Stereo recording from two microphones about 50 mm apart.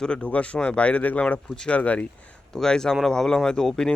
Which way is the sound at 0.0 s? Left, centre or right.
Centre.